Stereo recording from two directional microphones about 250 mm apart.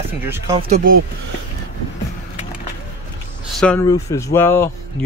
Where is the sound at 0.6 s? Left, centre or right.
Right.